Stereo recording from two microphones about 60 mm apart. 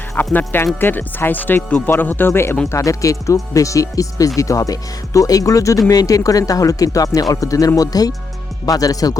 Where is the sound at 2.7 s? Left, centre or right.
Left.